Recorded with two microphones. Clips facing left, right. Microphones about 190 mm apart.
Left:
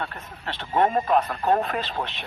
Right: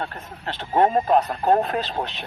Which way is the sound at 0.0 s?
40° right (ahead or behind).